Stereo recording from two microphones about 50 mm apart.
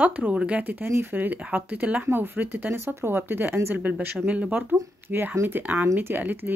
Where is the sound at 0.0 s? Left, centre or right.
Right.